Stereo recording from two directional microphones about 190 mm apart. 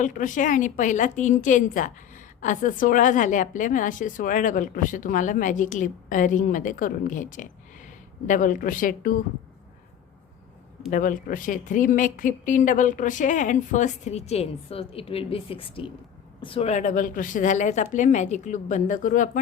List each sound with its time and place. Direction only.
0.0 s a woman's voice: 45° left (ahead or behind)
10.9 s speech: 45° left (ahead or behind)